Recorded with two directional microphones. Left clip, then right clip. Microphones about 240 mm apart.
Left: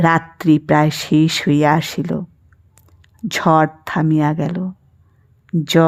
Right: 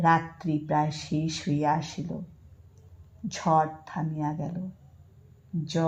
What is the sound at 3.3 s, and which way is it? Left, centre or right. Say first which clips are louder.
Speech: left 10 dB; left.